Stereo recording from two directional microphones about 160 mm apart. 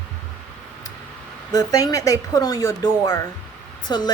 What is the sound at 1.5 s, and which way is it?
Speech, 20° left (ahead or behind).